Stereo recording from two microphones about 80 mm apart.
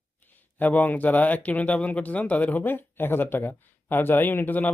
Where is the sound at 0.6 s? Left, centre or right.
Left.